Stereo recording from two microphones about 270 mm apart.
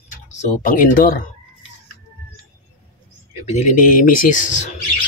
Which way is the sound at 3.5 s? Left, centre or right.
Left.